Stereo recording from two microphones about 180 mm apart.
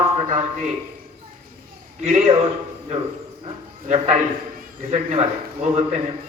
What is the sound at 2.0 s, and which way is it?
Speech, 40° right (ahead or behind).